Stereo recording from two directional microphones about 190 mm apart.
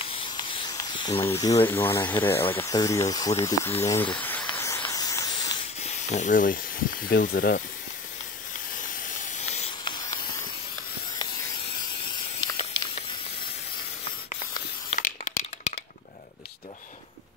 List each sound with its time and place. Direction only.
0.1 s hiss: 25° left (ahead or behind)
1.2 s speech: 15° left (ahead or behind)
3.8 s a sound: 10° left (ahead or behind)
6.0 s speech: 40° left (ahead or behind)
9.4 s hiss: 35° left (ahead or behind)
12.4 s hiss: 25° left (ahead or behind)
15.0 s crack: 40° left (ahead or behind)